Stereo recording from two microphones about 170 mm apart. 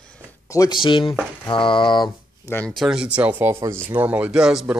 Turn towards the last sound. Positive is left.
turn(degrees=-5)  # may be behind; listen again after turning